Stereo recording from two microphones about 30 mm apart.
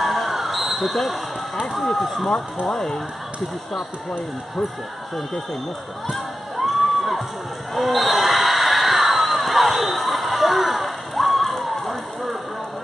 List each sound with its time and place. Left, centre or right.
0.0 s basketball bounce: centre
1.9 s speech: centre
2.2 s speech: centre
6.0 s crowd: centre
7.7 s a sound: centre